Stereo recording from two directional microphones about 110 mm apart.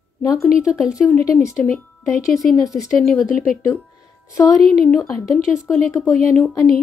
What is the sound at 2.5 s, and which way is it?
Speech, 30° left (ahead or behind).